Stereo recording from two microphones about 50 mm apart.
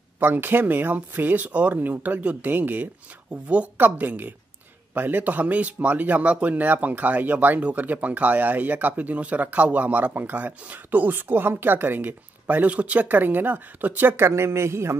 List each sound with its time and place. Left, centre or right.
0.2 s speech: right